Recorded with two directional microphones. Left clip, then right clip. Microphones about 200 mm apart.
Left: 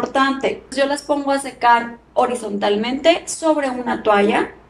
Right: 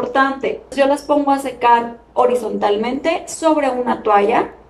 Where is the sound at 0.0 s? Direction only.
20° right (ahead or behind).